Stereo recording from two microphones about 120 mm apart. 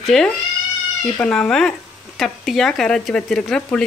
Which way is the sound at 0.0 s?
Centre (ahead or behind).